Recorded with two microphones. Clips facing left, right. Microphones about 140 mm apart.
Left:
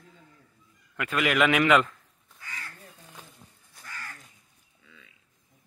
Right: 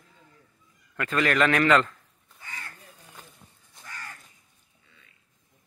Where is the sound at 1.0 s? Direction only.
10° left (ahead or behind).